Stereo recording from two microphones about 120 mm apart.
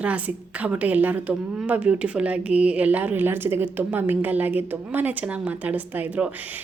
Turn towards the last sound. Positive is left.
turn(degrees=-15)  # may be behind; listen again after turning